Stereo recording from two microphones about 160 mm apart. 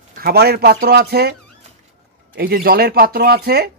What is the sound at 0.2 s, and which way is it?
Speech, 80° right.